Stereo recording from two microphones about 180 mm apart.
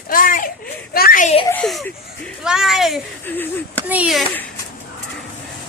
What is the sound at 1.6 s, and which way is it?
Speech, centre (ahead or behind).